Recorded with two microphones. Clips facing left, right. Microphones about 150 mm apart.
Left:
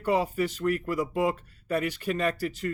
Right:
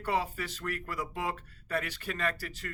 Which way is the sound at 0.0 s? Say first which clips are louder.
Left 7 dB; 15° left (ahead or behind).